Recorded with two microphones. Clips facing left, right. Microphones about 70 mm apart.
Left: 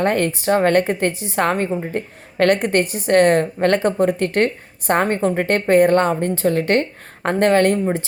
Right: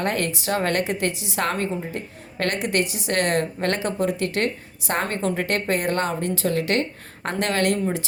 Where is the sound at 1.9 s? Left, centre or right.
Left.